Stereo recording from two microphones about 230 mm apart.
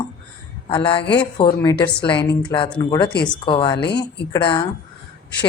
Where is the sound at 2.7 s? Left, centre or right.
Centre.